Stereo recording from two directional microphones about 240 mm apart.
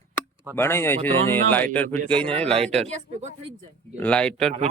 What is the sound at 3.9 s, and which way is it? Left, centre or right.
Speech, centre.